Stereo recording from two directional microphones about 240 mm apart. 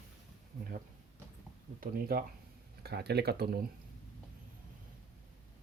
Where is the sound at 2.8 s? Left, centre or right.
Right.